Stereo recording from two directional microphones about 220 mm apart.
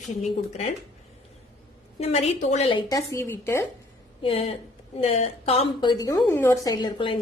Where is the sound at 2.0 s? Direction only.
30° left (ahead or behind); by 3.6 s 10° left (ahead or behind).